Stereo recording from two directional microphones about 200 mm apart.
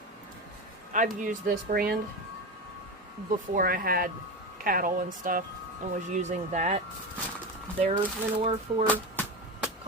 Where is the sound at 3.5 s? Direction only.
45° right (ahead or behind).